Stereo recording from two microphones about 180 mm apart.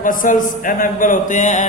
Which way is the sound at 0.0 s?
50° left (ahead or behind).